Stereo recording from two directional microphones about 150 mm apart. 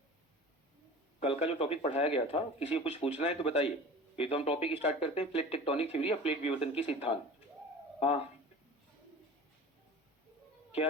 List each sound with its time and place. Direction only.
1.2 s speech: 40° left (ahead or behind)